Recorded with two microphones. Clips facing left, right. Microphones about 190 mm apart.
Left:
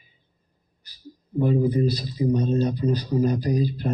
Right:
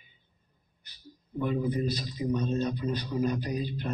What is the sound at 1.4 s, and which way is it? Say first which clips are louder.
Speech: left 8 dB; 35° left (ahead or behind).